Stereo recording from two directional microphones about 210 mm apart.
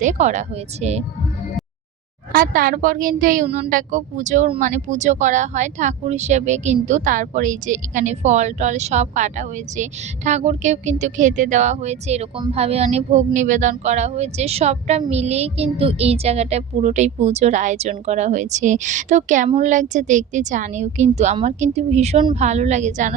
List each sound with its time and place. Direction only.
0.0 s a woman's voice: 35° right (ahead or behind)
2.3 s a woman's voice: 40° right (ahead or behind)